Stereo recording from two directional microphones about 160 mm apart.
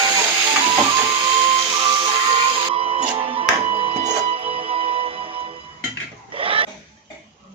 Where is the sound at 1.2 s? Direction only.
35° right (ahead or behind).